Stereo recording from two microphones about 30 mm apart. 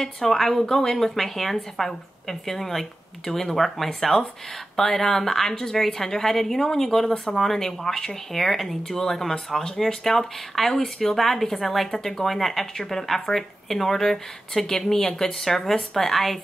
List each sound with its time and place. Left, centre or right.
0.0 s speech: centre
3.5 s speech: centre
7.6 s speech: centre
9.5 s speech: centre
9.8 s speech: centre